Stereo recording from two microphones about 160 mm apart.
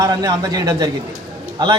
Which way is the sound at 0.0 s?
25° right (ahead or behind).